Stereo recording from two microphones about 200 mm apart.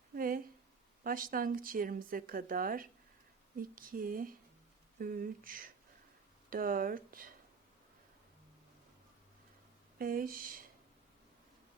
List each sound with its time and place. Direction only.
0.1 s a sound: 45° right (ahead or behind)
1.0 s speech: 45° right (ahead or behind)
10.0 s speech: 45° right (ahead or behind)